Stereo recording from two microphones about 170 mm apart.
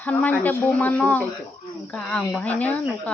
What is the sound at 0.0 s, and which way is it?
A woman's voice, 10° left (ahead or behind).